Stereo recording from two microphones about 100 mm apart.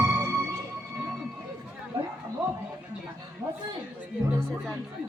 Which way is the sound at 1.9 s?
65° right (ahead or behind).